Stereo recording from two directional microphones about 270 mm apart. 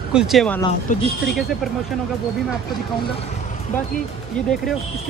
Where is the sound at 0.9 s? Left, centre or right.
Left.